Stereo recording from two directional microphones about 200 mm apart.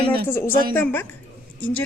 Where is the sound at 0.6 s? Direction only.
50° right (ahead or behind).